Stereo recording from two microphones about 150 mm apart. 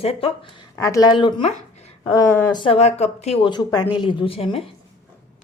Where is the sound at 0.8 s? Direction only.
20° left (ahead or behind).